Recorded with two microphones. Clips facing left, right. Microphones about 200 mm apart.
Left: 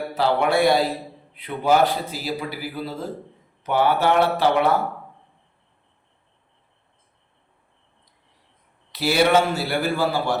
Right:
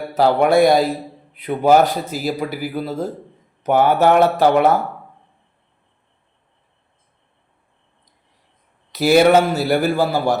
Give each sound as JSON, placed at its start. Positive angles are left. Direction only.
{"t": 0.1, "sound": "a man's voice", "side_deg": -40}
{"t": 8.9, "sound": "a man's voice", "side_deg": -45}